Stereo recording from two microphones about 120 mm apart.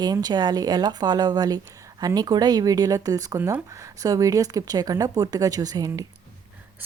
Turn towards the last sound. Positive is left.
turn(degrees=-30)  # may be behind; listen again after turning